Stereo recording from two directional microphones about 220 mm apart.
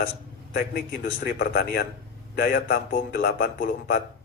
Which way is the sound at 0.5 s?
50° left (ahead or behind).